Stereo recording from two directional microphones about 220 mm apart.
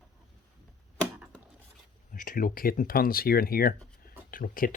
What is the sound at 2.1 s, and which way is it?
Speech, 40° left (ahead or behind).